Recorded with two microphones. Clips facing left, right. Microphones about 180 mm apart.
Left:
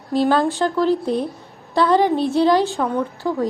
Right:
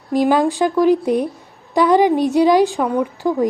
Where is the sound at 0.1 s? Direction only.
15° right (ahead or behind).